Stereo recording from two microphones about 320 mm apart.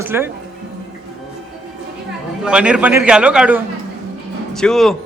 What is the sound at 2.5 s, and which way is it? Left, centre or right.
A man's voice, centre.